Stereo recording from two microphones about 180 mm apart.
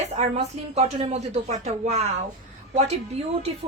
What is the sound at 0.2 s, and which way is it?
A woman's voice, 35° right (ahead or behind).